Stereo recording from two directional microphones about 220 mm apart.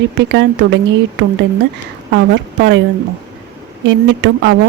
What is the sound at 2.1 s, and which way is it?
Speech, 55° right (ahead or behind).